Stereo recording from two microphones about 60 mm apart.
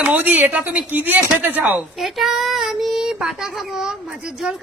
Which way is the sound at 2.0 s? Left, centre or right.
Centre.